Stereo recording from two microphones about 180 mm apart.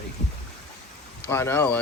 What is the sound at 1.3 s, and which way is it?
Speech, 15° left (ahead or behind).